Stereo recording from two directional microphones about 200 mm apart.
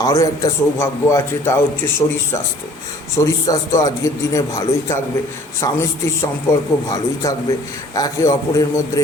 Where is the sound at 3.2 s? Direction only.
15° left (ahead or behind).